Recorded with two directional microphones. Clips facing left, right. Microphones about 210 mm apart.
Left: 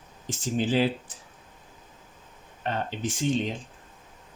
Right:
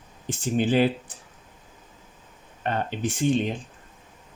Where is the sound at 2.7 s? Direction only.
60° right (ahead or behind).